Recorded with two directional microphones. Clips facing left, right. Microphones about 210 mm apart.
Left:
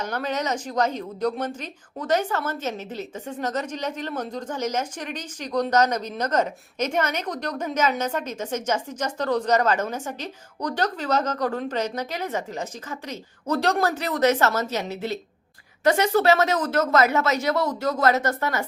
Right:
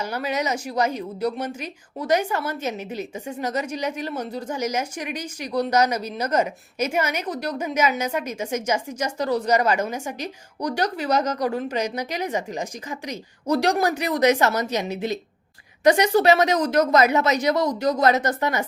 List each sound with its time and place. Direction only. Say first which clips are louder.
0.0 s speech: right 1 dB; 10° right (ahead or behind)